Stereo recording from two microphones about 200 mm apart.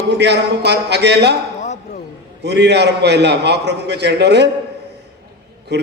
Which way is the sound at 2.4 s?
60° right (ahead or behind).